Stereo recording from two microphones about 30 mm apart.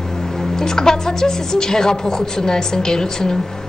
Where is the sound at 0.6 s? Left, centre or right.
Centre.